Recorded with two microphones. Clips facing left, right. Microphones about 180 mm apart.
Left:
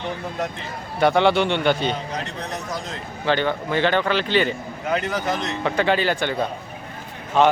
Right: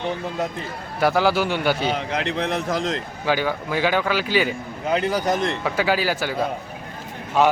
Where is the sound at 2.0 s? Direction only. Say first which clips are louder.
Right 5 dB; 65° right (ahead or behind); by 3.0 s 90° right.